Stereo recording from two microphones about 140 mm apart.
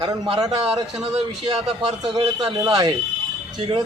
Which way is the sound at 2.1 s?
30° right (ahead or behind).